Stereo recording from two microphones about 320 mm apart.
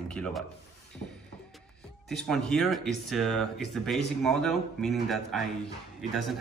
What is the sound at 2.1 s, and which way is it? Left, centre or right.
Speech, centre.